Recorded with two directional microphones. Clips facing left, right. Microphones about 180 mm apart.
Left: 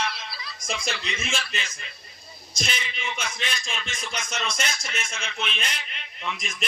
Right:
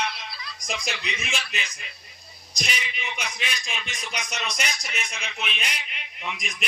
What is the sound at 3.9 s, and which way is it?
A man's voice, 15° right (ahead or behind).